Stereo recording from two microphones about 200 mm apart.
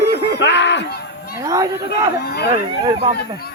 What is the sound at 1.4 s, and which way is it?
Speech, 15° right (ahead or behind).